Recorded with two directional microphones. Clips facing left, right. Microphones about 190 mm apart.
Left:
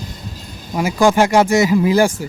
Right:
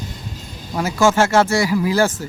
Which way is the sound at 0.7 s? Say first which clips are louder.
Left 2 dB; 15° left (ahead or behind).